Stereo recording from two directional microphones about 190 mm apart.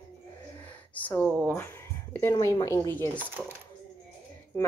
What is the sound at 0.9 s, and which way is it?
A woman's voice, 10° left (ahead or behind).